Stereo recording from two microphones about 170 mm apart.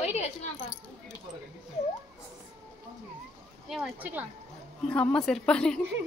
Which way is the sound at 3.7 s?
5° right (ahead or behind).